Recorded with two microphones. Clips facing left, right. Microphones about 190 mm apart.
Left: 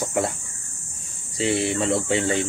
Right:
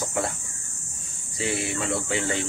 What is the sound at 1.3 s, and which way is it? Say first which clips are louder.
Speech: left 6 dB; 30° left (ahead or behind).